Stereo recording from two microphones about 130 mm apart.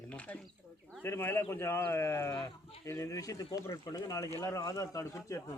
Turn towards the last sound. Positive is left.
turn(degrees=25)  # may be behind; listen again after turning